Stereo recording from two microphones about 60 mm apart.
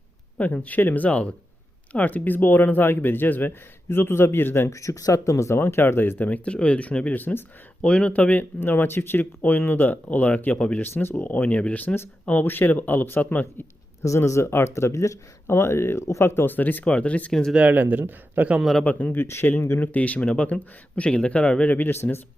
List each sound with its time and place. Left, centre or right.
0.3 s speech: left
4.7 s speech: left
7.9 s speech: centre
10.8 s speech: left
14.3 s speech: left
17.5 s speech: right
18.9 s speech: left
19.1 s speech: left
19.8 s speech: left
21.7 s speech: left